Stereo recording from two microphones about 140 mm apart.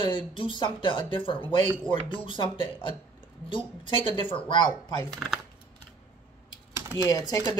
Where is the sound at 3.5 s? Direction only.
35° left (ahead or behind).